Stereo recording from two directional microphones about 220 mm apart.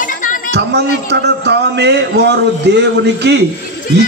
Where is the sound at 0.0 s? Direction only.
35° left (ahead or behind).